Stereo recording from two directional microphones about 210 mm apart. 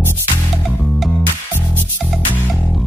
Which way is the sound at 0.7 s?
Centre (ahead or behind).